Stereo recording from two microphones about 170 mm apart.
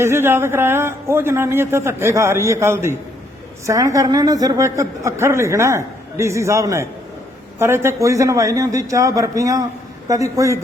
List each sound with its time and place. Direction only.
0.0 s a man's voice: 15° right (ahead or behind)